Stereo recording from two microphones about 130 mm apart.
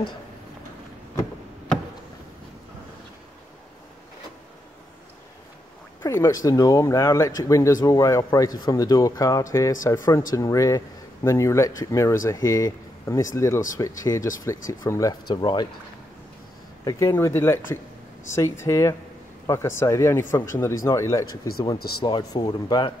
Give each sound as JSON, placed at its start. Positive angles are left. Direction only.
{"t": 6.0, "sound": "speech", "side_deg": 20}
{"t": 16.8, "sound": "speech", "side_deg": 20}